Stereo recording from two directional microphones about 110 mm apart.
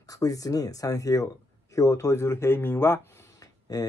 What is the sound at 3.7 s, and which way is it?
Speech, 35° left (ahead or behind).